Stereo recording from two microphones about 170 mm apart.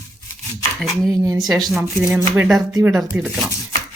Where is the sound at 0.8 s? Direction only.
Centre (ahead or behind).